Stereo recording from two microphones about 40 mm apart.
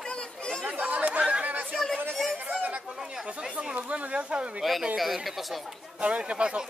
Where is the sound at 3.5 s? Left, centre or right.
Right.